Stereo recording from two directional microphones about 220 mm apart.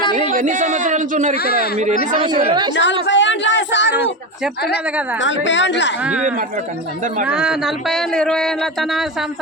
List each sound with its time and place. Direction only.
0.2 s a man's voice: 35° right (ahead or behind)
2.7 s speech: 55° left (ahead or behind)
5.2 s a woman's voice: 55° left (ahead or behind)
7.3 s speech: 5° right (ahead or behind)